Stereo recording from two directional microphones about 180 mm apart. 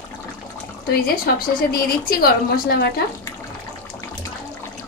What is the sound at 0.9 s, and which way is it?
A woman's voice, 55° left (ahead or behind).